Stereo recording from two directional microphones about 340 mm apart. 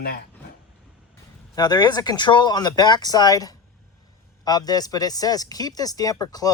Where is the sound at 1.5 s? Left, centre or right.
Centre.